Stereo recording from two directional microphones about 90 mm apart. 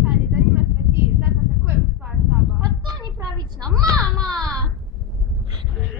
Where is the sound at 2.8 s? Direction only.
45° right (ahead or behind).